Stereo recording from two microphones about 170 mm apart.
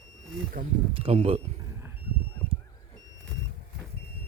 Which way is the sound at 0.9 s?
35° right (ahead or behind).